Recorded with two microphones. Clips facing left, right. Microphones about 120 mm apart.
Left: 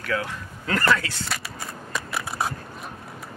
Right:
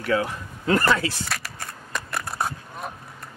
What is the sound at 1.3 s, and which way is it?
Crushing, centre (ahead or behind).